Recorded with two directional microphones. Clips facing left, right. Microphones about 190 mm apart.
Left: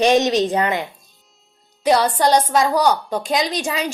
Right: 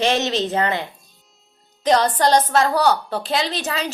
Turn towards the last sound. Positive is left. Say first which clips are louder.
# left 2 dB
turn(degrees=10)  # may be behind; listen again after turning